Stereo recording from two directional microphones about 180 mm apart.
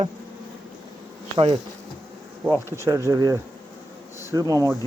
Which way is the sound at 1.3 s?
25° right (ahead or behind).